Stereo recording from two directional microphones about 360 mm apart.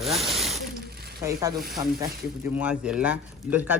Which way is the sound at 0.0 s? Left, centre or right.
Centre.